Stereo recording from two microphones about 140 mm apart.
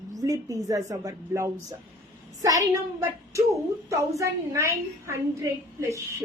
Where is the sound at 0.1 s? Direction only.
25° right (ahead or behind).